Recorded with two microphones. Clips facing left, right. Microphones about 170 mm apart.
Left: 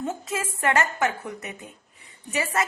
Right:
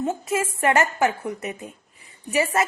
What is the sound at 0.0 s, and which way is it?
A woman's voice, 25° right (ahead or behind).